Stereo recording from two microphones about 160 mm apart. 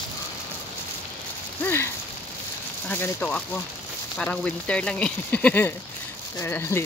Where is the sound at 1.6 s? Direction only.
15° left (ahead or behind).